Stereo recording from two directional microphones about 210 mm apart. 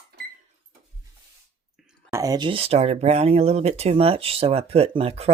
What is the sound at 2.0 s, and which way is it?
Speech, 15° right (ahead or behind).